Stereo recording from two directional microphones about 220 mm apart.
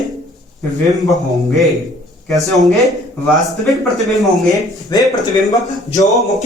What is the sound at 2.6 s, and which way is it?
Speech, centre (ahead or behind).